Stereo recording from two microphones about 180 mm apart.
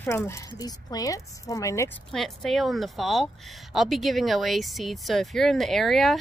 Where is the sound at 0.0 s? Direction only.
15° left (ahead or behind).